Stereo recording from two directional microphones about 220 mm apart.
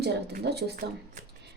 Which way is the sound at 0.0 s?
50° right (ahead or behind).